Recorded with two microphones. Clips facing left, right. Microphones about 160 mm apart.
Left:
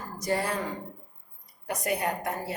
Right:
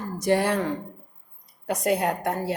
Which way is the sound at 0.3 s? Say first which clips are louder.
Right 7 dB; 80° right.